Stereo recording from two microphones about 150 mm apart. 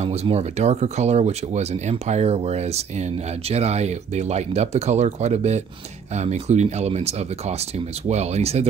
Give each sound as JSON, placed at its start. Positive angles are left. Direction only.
{"t": 0.0, "sound": "speech", "side_deg": -45}